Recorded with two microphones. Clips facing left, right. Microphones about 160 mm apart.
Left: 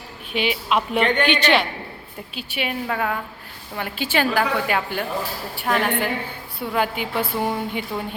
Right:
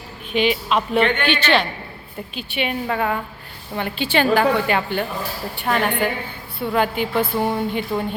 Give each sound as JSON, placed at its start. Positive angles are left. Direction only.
{"t": 0.3, "sound": "a woman's voice", "side_deg": 10}
{"t": 2.3, "sound": "a woman's voice", "side_deg": 5}